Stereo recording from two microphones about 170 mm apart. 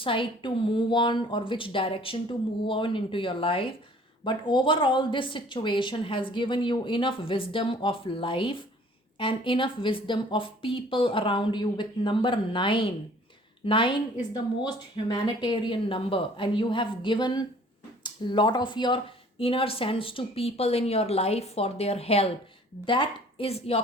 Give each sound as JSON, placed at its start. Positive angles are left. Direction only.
{"t": 0.0, "sound": "a woman's voice", "side_deg": 30}